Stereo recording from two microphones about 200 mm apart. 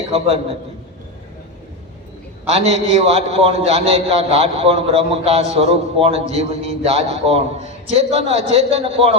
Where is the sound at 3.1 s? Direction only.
30° right (ahead or behind).